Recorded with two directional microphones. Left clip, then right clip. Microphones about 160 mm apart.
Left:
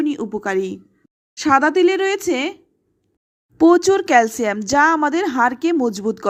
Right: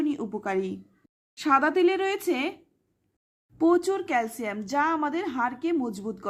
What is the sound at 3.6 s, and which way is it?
Speech, 40° left (ahead or behind).